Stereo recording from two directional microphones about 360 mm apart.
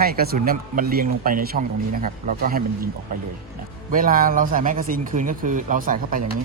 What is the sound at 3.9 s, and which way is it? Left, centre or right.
Speech, right.